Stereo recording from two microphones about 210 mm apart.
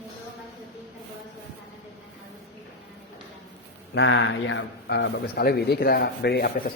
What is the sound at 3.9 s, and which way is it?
A man's voice, 60° left (ahead or behind).